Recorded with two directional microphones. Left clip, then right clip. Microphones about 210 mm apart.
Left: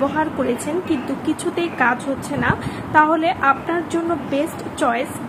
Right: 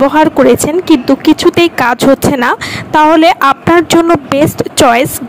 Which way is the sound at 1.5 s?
50° right (ahead or behind).